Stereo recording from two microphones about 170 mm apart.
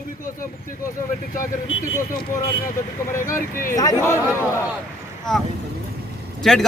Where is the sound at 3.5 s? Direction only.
55° left (ahead or behind).